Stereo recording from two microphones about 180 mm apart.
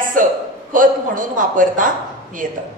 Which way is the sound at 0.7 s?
50° right (ahead or behind).